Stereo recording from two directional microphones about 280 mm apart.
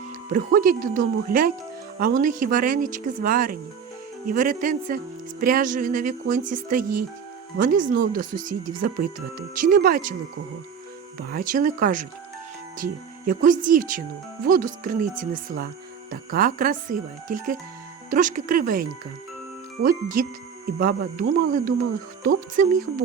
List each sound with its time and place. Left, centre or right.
0.3 s speech: right
11.3 s speech: right